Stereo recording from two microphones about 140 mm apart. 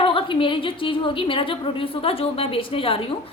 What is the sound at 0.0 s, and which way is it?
A woman's voice, 40° left (ahead or behind).